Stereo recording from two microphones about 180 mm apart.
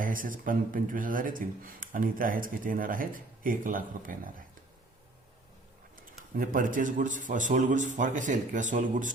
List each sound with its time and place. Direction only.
0.0 s speech: 50° right (ahead or behind)
6.0 s speech: 50° right (ahead or behind)